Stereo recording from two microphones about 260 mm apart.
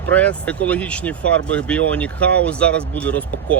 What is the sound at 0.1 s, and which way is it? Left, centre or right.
Speech, centre.